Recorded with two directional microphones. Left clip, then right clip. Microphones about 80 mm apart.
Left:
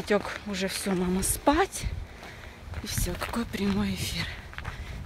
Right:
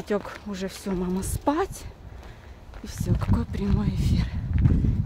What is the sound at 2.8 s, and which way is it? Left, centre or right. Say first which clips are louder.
Speech: left 1 dB; right.